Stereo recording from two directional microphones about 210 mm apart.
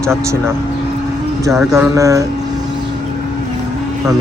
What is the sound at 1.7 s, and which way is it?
Speech, 15° right (ahead or behind).